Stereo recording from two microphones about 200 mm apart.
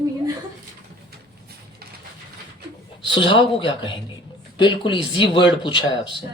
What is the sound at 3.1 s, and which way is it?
Speech, 25° left (ahead or behind).